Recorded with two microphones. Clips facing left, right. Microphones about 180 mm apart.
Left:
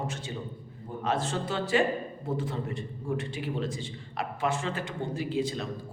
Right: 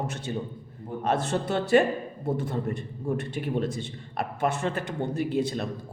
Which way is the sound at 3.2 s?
55° right (ahead or behind).